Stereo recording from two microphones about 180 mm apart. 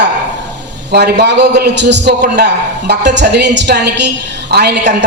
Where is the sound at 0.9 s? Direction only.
70° right (ahead or behind).